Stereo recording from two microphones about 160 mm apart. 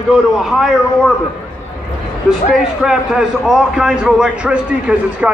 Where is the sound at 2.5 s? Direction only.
5° right (ahead or behind).